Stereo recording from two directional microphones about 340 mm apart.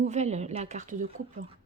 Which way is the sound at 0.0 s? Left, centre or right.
Centre.